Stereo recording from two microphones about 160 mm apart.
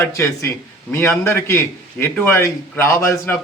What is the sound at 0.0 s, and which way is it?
A man's voice, 15° left (ahead or behind).